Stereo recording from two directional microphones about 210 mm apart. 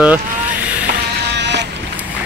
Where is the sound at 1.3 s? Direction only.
55° right (ahead or behind).